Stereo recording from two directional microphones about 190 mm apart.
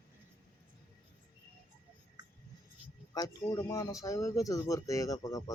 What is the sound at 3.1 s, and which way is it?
Speech, 20° left (ahead or behind).